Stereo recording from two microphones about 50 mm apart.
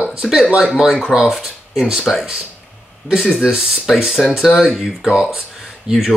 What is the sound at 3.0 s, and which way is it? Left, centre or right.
Speech, left.